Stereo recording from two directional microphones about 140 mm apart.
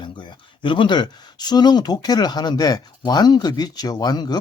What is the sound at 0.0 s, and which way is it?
Speech, 35° left (ahead or behind).